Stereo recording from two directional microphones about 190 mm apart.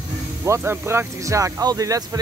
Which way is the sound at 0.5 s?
15° right (ahead or behind).